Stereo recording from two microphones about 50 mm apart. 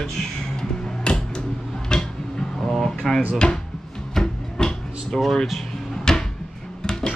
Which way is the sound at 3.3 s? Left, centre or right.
Centre.